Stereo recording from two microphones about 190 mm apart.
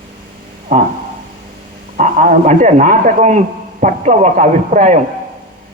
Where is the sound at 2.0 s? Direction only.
40° right (ahead or behind).